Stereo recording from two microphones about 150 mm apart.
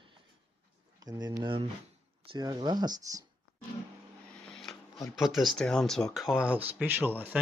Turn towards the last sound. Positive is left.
turn(degrees=-10)  # may be behind; listen again after turning